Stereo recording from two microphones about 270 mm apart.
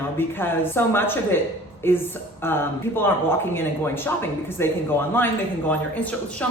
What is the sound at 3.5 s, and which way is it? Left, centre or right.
Speech, centre.